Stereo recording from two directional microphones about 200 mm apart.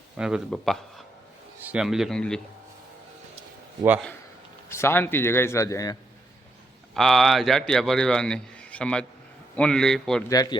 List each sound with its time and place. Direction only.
0.2 s a man's voice: 5° right (ahead or behind)
4.7 s a man's voice: 10° left (ahead or behind)
6.9 s a man's voice: centre (ahead or behind)
10.2 s a man's voice: 20° left (ahead or behind)